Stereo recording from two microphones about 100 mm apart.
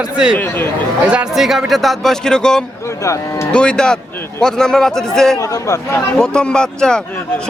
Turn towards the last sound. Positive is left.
turn(degrees=10)  # may be behind; listen again after turning